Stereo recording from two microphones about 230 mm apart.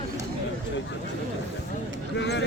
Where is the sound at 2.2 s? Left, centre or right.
Left.